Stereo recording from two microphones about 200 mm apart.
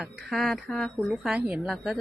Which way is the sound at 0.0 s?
Centre (ahead or behind).